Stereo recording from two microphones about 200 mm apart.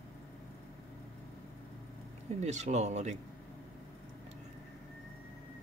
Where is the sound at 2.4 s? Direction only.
35° right (ahead or behind).